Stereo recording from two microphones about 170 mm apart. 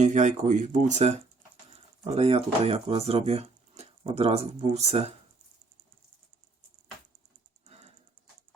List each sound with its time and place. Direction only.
0.0 s speech: 45° right (ahead or behind)